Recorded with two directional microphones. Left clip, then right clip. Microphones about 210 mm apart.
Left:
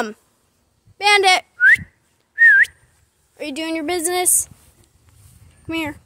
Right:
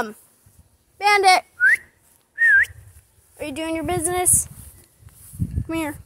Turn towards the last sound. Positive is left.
turn(degrees=10)  # may be behind; listen again after turning